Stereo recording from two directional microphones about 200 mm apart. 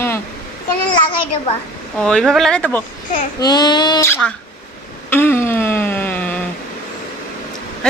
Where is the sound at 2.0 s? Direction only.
5° left (ahead or behind).